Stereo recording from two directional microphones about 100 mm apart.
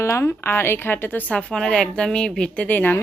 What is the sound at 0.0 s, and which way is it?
A woman's voice, 30° left (ahead or behind).